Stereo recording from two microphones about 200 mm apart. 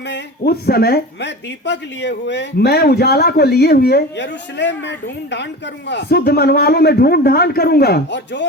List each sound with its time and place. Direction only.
0.1 s a woman's voice: 55° left (ahead or behind)